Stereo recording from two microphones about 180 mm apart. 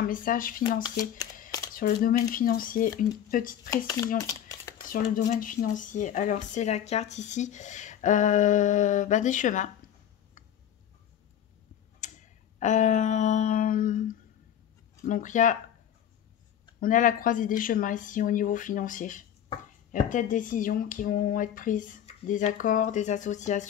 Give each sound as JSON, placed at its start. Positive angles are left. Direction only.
{"t": 0.0, "sound": "speech", "side_deg": 50}
{"t": 0.8, "sound": "speech", "side_deg": 20}
{"t": 1.7, "sound": "speech", "side_deg": 50}
{"t": 3.7, "sound": "speech", "side_deg": 20}
{"t": 4.8, "sound": "speech", "side_deg": 50}
{"t": 12.0, "sound": "a sound", "side_deg": 40}
{"t": 15.0, "sound": "speech", "side_deg": 45}
{"t": 16.8, "sound": "speech", "side_deg": 50}